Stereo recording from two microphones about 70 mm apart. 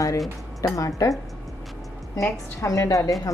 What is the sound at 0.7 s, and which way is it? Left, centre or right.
Speech, left.